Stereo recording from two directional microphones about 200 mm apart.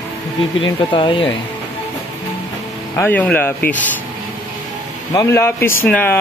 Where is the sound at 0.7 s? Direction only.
20° left (ahead or behind).